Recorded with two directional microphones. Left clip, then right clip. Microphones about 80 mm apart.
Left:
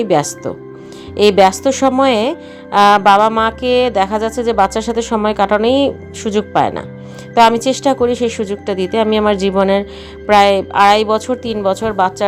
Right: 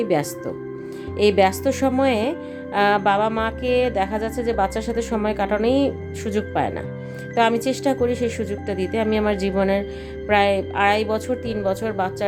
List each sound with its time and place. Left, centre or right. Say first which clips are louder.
0.0 s music: left 7 dB; left
6.5 s speech: left 10 dB; left
7.3 s music: left 9 dB; left